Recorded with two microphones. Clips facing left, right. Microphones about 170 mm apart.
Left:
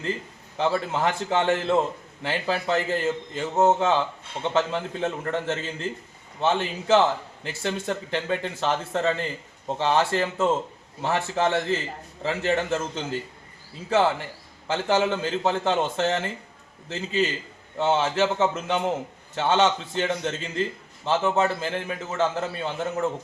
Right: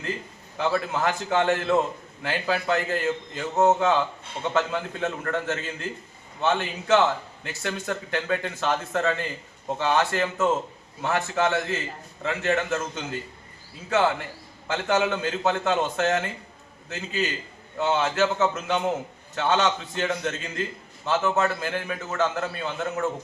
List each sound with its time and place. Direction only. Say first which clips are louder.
0.5 s a man's voice: left 1 dB; 30° left (ahead or behind)